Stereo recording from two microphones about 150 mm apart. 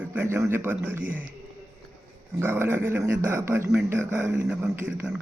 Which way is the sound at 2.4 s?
15° right (ahead or behind).